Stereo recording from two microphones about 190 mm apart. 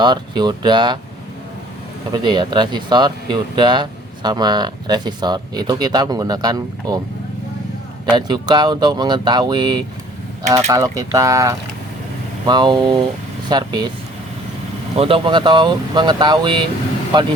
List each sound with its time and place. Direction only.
0.0 s speech: 20° right (ahead or behind)
2.1 s speech: 25° right (ahead or behind)
8.1 s speech: 25° right (ahead or behind)
14.9 s speech: 30° right (ahead or behind)